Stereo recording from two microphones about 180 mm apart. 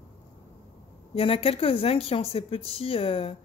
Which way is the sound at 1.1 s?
30° left (ahead or behind).